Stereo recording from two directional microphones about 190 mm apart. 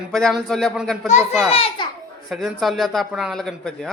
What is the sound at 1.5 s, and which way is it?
Speech, 30° left (ahead or behind).